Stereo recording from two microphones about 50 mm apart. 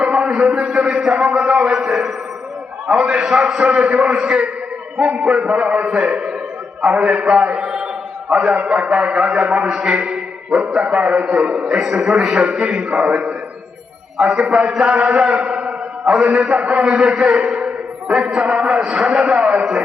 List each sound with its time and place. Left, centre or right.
0.0 s a sound: right
0.7 s a man's voice: centre
2.8 s a man's voice: centre
9.7 s a sound: centre
10.8 s a man's voice: right
12.0 s a man's voice: centre
14.8 s mantra: right
16.1 s a man's voice: right
19.2 s a man's voice: right